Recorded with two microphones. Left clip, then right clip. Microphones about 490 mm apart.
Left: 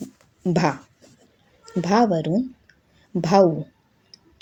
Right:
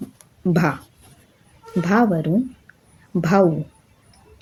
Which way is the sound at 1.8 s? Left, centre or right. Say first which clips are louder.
Even; right.